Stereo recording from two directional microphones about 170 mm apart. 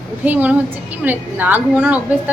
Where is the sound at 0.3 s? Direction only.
10° right (ahead or behind).